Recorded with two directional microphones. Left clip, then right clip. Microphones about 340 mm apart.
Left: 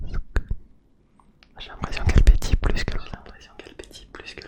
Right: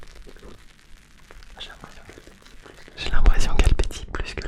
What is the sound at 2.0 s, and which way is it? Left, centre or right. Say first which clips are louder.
Whispering: left 17 dB; left.